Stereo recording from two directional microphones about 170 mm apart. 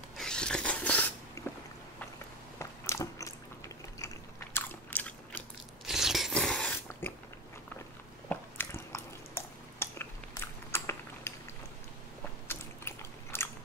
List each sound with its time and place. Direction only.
0.2 s a sound: 5° left (ahead or behind)
2.6 s biting: 15° left (ahead or behind)
5.9 s biting: centre (ahead or behind)
8.3 s squish: 15° left (ahead or behind)
12.4 s biting: 15° left (ahead or behind)